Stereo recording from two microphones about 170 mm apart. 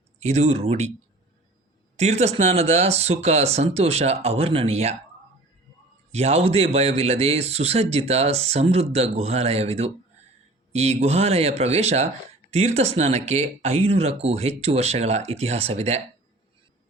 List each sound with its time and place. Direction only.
0.2 s speech: 40° right (ahead or behind)
2.0 s speech: 40° right (ahead or behind)
6.1 s speech: 40° right (ahead or behind)